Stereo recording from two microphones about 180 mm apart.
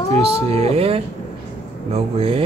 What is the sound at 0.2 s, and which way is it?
Mantra, 35° right (ahead or behind).